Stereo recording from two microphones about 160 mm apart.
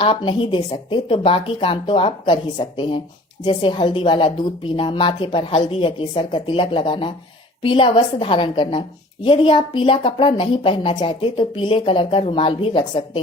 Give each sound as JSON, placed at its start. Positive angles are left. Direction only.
{"t": 0.0, "sound": "a woman's voice", "side_deg": 30}